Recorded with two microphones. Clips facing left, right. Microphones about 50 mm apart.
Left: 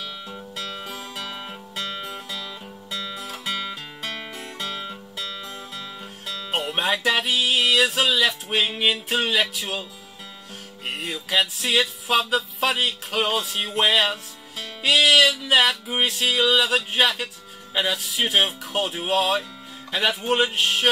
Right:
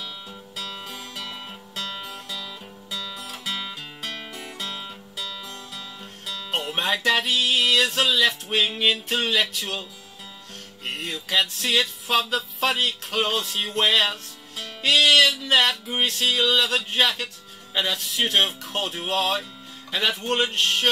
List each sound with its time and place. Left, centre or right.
0.7 s music: centre
3.4 s music: centre
6.2 s music: centre
10.9 s music: centre